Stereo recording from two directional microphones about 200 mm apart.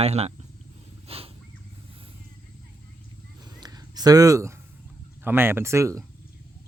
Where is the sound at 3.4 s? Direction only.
20° right (ahead or behind).